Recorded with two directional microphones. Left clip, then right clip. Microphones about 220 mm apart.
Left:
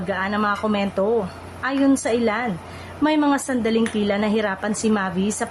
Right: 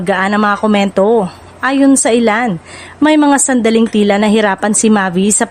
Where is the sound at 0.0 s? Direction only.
45° right (ahead or behind).